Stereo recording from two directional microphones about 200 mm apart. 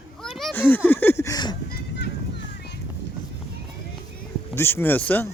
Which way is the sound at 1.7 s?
55° left (ahead or behind).